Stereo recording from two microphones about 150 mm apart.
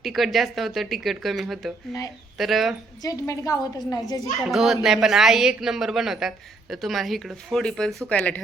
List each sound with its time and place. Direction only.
0.0 s speech: centre (ahead or behind)
3.0 s a woman's voice: 25° left (ahead or behind)
4.4 s speech: centre (ahead or behind)